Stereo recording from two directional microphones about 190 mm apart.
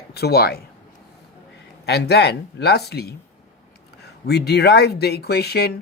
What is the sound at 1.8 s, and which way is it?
Speech, 60° left (ahead or behind).